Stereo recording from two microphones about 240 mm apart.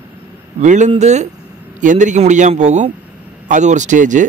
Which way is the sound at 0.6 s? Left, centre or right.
Right.